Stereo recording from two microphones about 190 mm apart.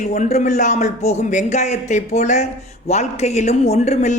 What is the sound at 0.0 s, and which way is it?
A man's voice, 40° left (ahead or behind).